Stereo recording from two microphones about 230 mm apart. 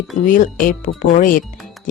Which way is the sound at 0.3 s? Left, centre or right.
Left.